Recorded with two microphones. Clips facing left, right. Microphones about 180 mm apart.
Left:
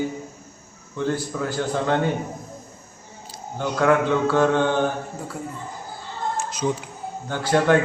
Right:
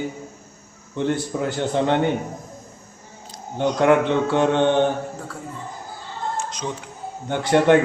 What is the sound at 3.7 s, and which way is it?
A man's voice, 20° right (ahead or behind).